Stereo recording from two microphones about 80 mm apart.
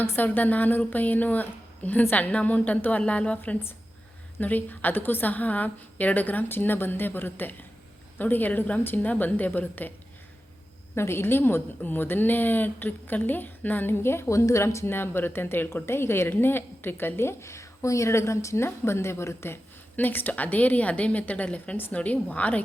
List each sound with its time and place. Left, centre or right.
0.0 s a woman's voice: left
10.9 s a woman's voice: left
20.0 s a woman's voice: left